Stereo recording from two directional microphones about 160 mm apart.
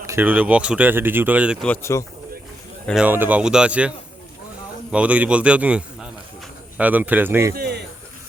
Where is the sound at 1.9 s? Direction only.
20° left (ahead or behind).